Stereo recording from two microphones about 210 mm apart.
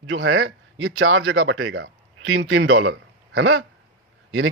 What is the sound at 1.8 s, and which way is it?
A man's voice, 65° right (ahead or behind).